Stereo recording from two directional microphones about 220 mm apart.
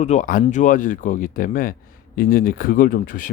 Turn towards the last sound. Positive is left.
turn(degrees=40)  # may be behind; listen again after turning